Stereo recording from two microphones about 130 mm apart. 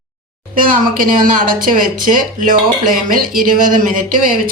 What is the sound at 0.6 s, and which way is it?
Speech, 90° right.